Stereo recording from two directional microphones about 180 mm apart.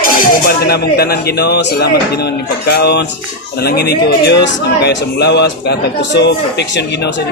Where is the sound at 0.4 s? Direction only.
60° left (ahead or behind).